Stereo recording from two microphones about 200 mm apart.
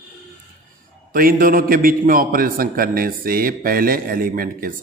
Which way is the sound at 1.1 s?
45° right (ahead or behind).